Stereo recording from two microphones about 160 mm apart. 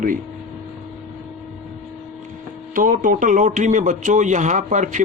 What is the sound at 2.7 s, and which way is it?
A man's voice, 60° right (ahead or behind).